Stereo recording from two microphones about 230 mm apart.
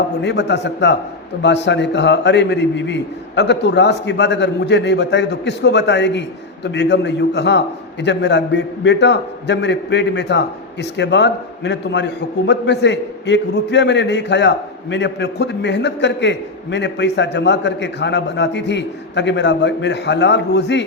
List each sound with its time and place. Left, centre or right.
0.2 s a man's voice: left